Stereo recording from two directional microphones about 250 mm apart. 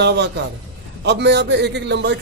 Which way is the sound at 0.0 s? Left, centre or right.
Right.